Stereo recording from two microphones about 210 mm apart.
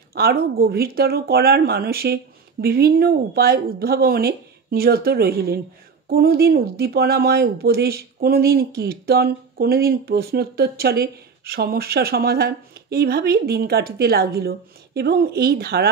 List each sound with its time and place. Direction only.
0.1 s speech: 45° right (ahead or behind)